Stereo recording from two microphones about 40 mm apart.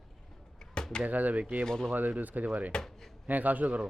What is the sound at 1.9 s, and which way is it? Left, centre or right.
A man's voice, right.